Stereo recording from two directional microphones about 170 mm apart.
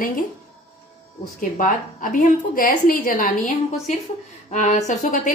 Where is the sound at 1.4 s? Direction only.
50° left (ahead or behind).